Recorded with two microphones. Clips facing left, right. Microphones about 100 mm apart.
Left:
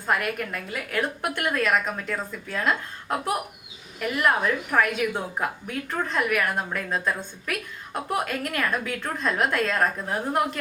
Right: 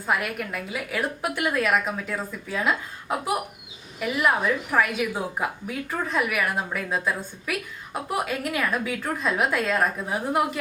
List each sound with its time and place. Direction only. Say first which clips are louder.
0.0 s a woman's voice: left 1 dB; 5° right (ahead or behind)